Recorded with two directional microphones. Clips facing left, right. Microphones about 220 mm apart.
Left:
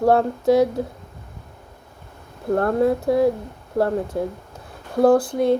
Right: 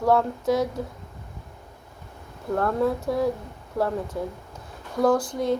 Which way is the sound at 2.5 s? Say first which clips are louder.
Left 5 dB; 40° left (ahead or behind).